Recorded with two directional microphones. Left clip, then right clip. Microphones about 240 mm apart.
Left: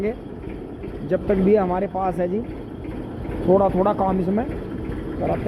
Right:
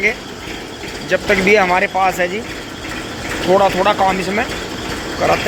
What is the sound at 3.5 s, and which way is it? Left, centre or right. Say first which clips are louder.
Speech: right 5 dB; centre.